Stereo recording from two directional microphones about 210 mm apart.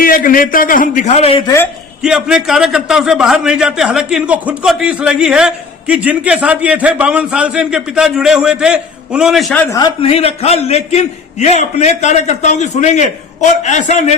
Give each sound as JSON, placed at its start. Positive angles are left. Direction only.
{"t": 0.0, "sound": "a man's voice", "side_deg": 40}
{"t": 2.0, "sound": "a man's voice", "side_deg": -5}
{"t": 9.7, "sound": "a man's voice", "side_deg": 25}